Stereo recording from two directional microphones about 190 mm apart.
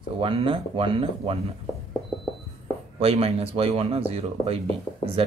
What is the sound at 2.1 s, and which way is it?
Music, centre (ahead or behind).